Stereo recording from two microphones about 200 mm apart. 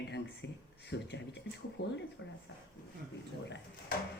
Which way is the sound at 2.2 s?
70° left (ahead or behind).